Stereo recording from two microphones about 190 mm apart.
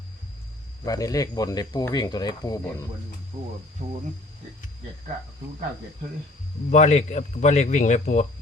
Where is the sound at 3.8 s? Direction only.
35° right (ahead or behind).